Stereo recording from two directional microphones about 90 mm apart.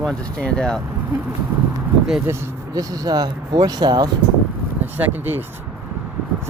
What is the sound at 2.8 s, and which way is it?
Speech, 45° right (ahead or behind).